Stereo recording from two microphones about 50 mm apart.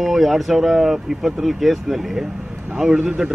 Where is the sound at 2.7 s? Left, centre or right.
Centre.